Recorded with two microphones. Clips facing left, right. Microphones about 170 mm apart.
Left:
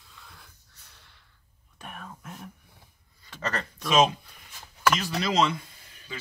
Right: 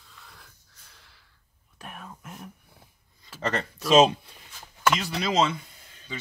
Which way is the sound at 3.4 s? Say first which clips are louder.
Right 3 dB; 25° right (ahead or behind).